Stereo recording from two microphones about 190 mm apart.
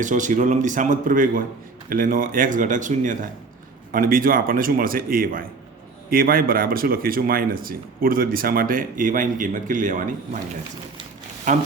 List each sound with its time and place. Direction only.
0.0 s speech: 40° right (ahead or behind)